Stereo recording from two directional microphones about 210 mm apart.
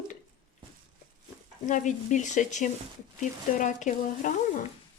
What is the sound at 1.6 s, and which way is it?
Speech, 35° left (ahead or behind).